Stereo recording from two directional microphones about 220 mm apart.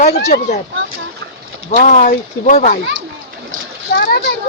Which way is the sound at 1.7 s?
40° left (ahead or behind).